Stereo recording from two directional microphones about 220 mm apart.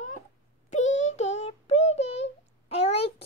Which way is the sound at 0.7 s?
30° left (ahead or behind).